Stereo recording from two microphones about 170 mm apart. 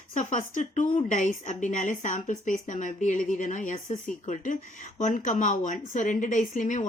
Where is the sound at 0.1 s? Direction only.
50° left (ahead or behind).